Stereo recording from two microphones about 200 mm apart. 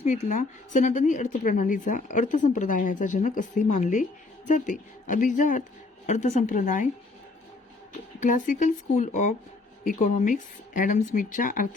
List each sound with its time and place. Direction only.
0.0 s a woman's voice: 35° left (ahead or behind)
8.2 s a woman's voice: 40° left (ahead or behind)